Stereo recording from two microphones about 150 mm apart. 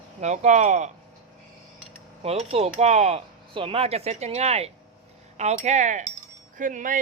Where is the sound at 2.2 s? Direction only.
45° right (ahead or behind).